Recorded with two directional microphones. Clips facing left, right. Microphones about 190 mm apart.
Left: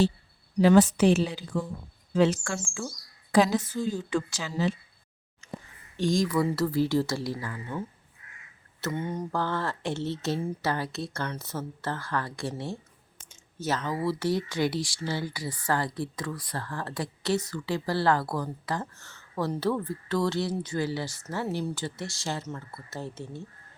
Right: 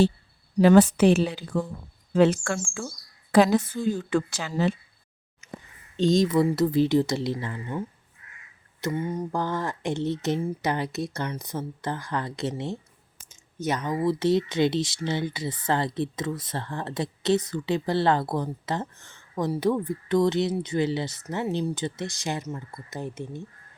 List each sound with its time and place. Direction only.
0.6 s a woman's voice: 55° right (ahead or behind)
6.0 s speech: 20° right (ahead or behind)
8.8 s speech: 10° right (ahead or behind)